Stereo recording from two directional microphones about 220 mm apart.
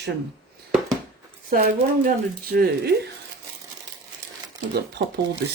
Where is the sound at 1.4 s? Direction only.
40° right (ahead or behind).